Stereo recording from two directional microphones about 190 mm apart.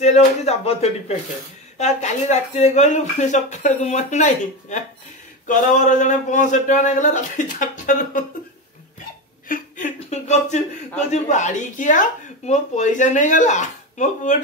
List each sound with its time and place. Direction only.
0.0 s speech: 35° left (ahead or behind)
9.5 s speech: 40° left (ahead or behind)